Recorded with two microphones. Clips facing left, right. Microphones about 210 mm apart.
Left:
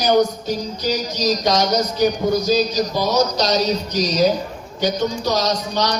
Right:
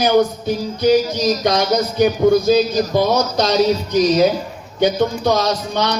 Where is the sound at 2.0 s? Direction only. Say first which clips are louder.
Right 6 dB; 55° right (ahead or behind).